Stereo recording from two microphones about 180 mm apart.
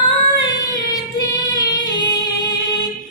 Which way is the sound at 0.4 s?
20° left (ahead or behind).